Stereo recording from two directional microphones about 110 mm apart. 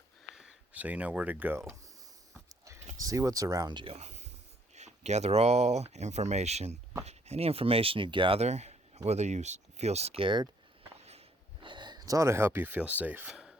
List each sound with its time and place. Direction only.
0.3 s speech: 10° right (ahead or behind)
3.0 s speech: 35° right (ahead or behind)
3.8 s a sound: 85° right
4.7 s speech: 90° right; by 8.4 s 50° right (ahead or behind)
8.4 s speech: 90° right; by 10.2 s 70° right (ahead or behind)
10.2 s speech: 45° right (ahead or behind)
10.9 s walk: 70° right (ahead or behind)
11.6 s speech: 45° right (ahead or behind); by 13.6 s 5° right (ahead or behind)